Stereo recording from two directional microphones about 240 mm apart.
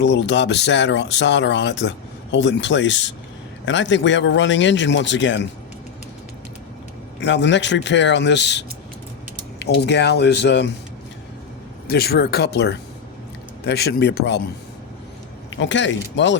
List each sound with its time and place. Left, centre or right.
0.0 s speech: left
7.2 s speech: left
11.9 s speech: left
15.5 s speech: left